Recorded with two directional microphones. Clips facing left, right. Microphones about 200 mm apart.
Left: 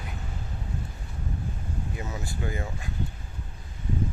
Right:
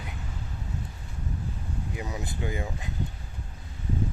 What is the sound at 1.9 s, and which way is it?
Speech, 15° right (ahead or behind).